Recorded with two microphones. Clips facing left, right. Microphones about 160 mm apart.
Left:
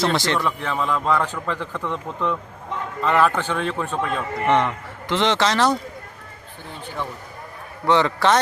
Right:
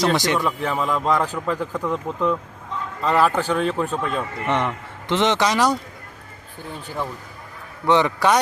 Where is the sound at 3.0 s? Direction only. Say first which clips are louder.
Even; 35° right (ahead or behind).